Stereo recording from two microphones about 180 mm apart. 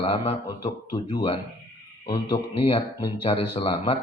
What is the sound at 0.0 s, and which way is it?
A man's voice, 35° left (ahead or behind).